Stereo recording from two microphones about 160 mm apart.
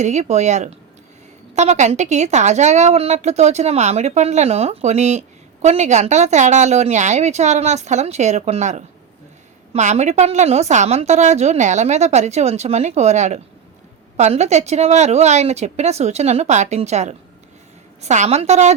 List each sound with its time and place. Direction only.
0.0 s a woman's voice: 45° right (ahead or behind)